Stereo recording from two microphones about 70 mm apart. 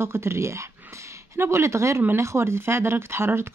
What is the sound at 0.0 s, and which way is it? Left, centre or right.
Speech, right.